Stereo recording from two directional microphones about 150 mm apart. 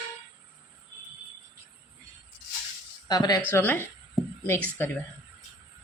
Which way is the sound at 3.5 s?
15° left (ahead or behind).